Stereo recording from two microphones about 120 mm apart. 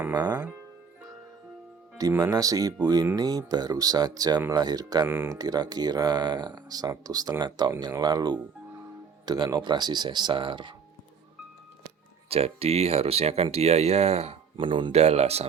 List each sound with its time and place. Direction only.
0.1 s speech: 30° right (ahead or behind)
2.0 s speech: 30° right (ahead or behind)
5.0 s speech: 20° right (ahead or behind)
5.3 s speech: 30° right (ahead or behind)
12.3 s speech: 55° right (ahead or behind)
14.5 s speech: 45° right (ahead or behind)
14.9 s speech: 60° right (ahead or behind)